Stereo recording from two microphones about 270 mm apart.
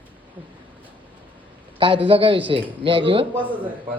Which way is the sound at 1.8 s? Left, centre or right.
Centre.